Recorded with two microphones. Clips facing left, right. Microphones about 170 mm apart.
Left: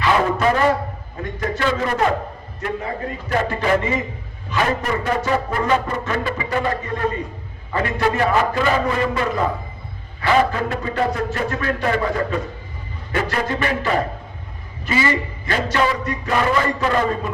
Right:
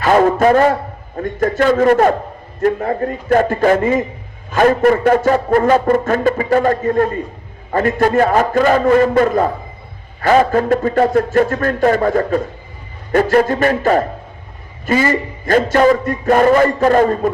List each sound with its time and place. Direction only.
0.0 s speech: 45° right (ahead or behind)